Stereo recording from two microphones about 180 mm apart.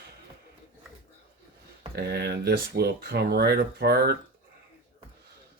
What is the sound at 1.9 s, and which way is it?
Speech, 65° right (ahead or behind).